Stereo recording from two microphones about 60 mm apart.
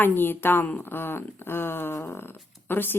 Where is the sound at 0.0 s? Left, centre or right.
Left.